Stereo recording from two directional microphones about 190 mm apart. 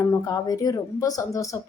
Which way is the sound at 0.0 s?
20° left (ahead or behind).